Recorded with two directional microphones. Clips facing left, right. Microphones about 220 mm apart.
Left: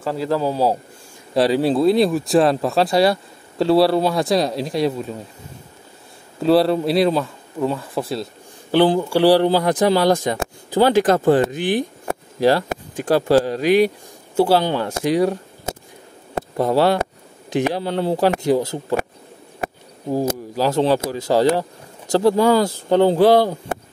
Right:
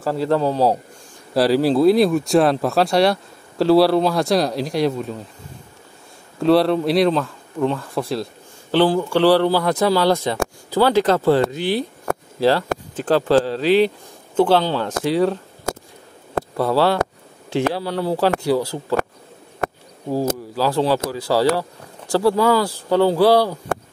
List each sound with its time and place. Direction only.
0.0 s speech: centre (ahead or behind)
6.4 s speech: centre (ahead or behind)
8.7 s speech: 15° left (ahead or behind)
20.1 s speech: 15° left (ahead or behind)